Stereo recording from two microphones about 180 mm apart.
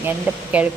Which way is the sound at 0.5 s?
5° right (ahead or behind).